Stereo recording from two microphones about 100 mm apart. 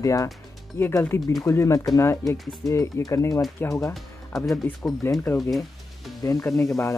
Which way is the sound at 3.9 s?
Centre (ahead or behind).